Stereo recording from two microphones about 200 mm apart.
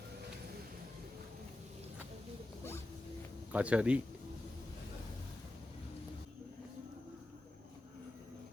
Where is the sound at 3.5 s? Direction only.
5° right (ahead or behind).